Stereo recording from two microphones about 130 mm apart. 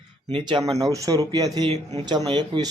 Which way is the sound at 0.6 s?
25° right (ahead or behind).